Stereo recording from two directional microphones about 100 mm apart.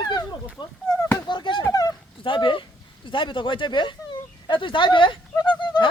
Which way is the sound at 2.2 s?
60° left (ahead or behind).